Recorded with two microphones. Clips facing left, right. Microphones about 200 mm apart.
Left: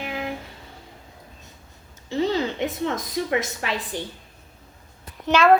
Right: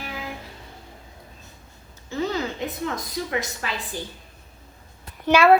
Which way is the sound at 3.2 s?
25° left (ahead or behind).